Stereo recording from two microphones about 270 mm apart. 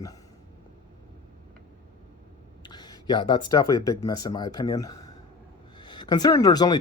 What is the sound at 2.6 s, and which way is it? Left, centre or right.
Speech, centre.